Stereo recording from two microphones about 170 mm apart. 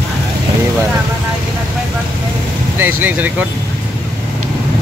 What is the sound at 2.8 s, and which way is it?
Speech, 10° right (ahead or behind).